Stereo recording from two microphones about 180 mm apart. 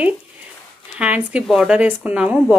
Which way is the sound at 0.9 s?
5° right (ahead or behind).